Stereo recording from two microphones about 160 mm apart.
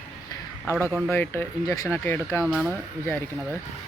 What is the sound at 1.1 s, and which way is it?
Speech, 15° left (ahead or behind).